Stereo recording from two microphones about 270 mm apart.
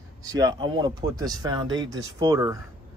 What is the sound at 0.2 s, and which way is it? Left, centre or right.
Speech, centre.